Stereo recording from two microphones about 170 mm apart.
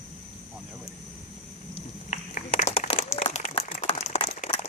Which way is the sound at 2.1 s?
50° left (ahead or behind).